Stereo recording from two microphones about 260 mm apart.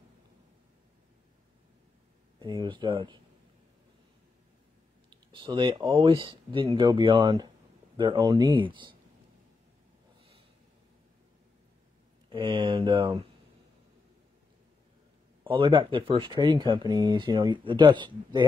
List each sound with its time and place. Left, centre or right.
2.4 s speech: centre
5.1 s speech: centre
12.3 s speech: centre
15.4 s speech: centre